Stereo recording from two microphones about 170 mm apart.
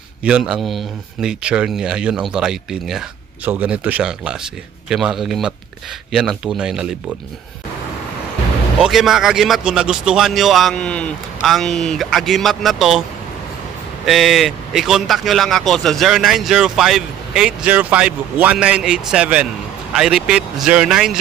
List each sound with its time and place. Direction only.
0.3 s speech: 5° right (ahead or behind)
8.8 s speech: centre (ahead or behind)
14.0 s speech: centre (ahead or behind)